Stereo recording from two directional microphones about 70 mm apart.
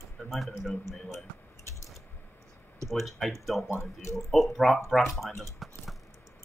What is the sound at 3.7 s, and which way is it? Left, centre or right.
Speech, left.